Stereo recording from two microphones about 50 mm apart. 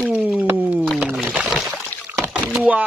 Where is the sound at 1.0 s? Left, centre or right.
Centre.